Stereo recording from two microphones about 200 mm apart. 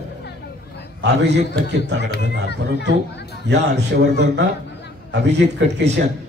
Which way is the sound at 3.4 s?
55° right (ahead or behind).